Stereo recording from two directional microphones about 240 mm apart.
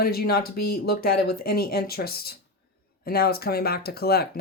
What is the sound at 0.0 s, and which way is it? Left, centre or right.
Speech, left.